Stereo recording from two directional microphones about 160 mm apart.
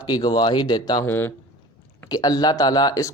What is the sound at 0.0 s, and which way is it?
Speech, 25° left (ahead or behind).